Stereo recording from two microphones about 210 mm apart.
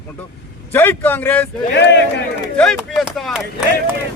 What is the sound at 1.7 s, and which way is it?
Speech, 55° left (ahead or behind).